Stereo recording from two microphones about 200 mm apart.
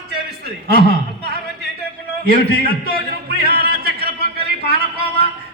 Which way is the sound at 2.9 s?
50° right (ahead or behind).